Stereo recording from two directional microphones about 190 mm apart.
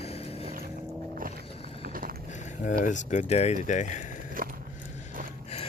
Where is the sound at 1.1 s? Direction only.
45° right (ahead or behind).